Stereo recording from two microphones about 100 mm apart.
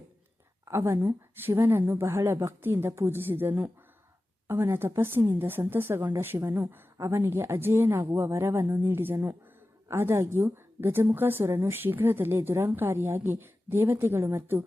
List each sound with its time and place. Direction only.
0.6 s a woman's voice: 30° right (ahead or behind)